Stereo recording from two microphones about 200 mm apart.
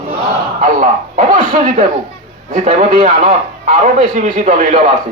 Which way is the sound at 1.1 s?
40° right (ahead or behind).